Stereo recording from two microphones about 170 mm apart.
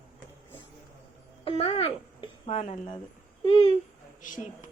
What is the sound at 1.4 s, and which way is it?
Speech, 35° left (ahead or behind).